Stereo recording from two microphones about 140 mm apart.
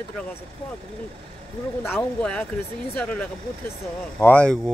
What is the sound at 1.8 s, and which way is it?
Speech, 15° left (ahead or behind).